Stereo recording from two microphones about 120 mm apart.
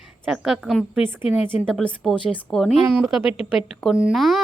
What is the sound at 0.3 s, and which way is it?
A woman's voice, 5° right (ahead or behind).